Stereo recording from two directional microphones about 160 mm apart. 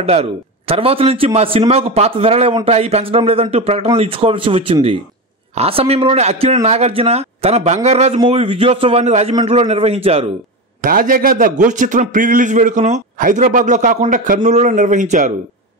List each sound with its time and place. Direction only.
0.0 s a man's voice: 40° right (ahead or behind)
10.8 s a man's voice: 60° right (ahead or behind)